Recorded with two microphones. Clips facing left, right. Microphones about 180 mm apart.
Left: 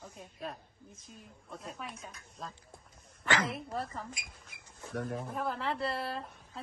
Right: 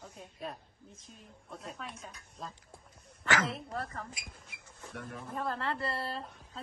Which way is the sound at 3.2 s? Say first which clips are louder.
Even; 15° left (ahead or behind).